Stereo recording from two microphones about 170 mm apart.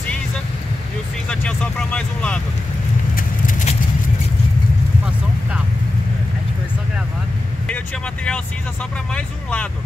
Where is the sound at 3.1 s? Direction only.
50° left (ahead or behind).